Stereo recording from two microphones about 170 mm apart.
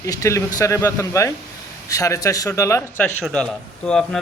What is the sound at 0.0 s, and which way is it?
Speech, 20° left (ahead or behind).